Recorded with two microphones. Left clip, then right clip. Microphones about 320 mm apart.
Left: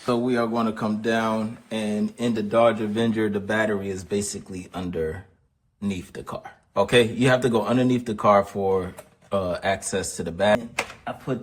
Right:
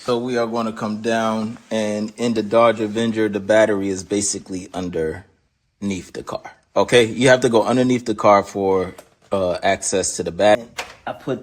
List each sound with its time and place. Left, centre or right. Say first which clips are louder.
0.0 s speech: right 3 dB; centre
11.1 s speech: right 4 dB; right